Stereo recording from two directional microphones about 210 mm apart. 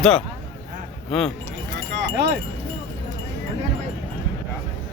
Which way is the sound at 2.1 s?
55° right (ahead or behind).